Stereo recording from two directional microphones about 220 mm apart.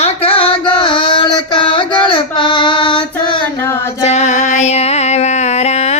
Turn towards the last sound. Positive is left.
turn(degrees=30)  # may be behind; listen again after turning